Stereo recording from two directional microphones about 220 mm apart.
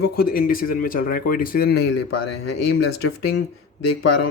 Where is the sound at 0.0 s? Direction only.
45° left (ahead or behind).